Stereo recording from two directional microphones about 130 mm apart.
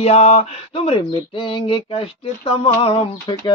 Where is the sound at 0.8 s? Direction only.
45° left (ahead or behind).